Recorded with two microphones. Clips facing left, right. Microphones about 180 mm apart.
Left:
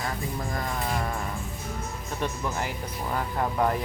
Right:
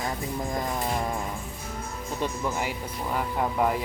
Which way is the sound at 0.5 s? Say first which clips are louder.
Right 2 dB; 20° right (ahead or behind).